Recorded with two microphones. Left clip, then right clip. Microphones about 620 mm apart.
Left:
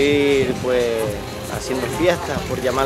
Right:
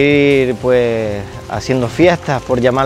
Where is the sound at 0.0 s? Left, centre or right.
Right.